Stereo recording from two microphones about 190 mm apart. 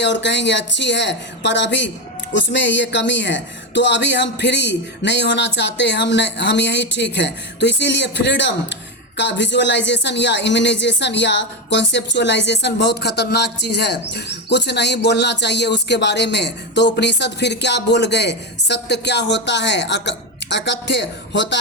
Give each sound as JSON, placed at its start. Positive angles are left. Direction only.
{"t": 0.0, "sound": "speech", "side_deg": 65}